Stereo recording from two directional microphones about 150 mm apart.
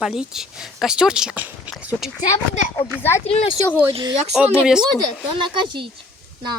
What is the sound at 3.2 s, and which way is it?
Speech, 40° left (ahead or behind).